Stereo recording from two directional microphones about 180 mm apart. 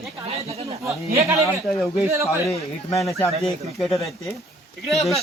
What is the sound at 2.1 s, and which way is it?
Speech, 15° right (ahead or behind).